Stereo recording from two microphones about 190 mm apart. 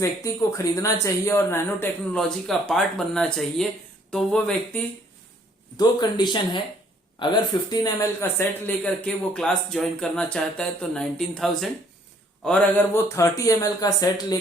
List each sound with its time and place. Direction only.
0.0 s speech: 15° left (ahead or behind)
5.7 s speech: 20° left (ahead or behind)